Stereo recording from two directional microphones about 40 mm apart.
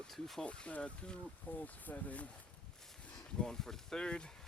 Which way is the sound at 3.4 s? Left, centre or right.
Centre.